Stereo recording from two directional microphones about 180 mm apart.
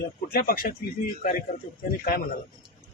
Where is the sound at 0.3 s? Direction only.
55° left (ahead or behind).